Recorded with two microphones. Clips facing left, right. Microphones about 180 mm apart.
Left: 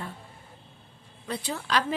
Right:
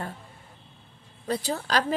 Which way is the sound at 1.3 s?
40° right (ahead or behind).